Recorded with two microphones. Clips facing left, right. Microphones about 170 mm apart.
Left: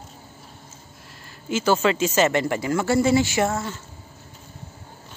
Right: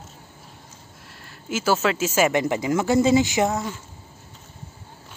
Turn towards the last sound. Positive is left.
turn(degrees=-15)  # may be behind; listen again after turning